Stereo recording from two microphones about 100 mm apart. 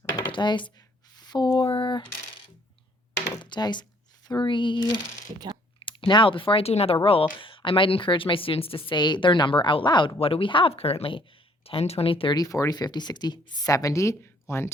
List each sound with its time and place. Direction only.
0.3 s speech: 50° left (ahead or behind)
0.8 s a sound: 45° left (ahead or behind)
3.4 s speech: 50° left (ahead or behind)
10.2 s speech: 70° left (ahead or behind)
12.3 s speech: 35° left (ahead or behind)